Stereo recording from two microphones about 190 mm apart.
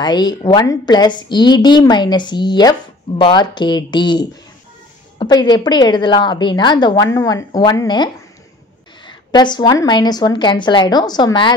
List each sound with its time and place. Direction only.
0.0 s a woman's voice: 20° left (ahead or behind)